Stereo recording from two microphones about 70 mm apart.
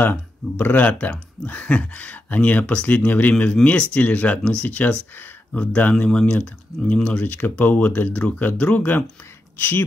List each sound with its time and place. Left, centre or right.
0.0 s speech: left
7.2 s speech: left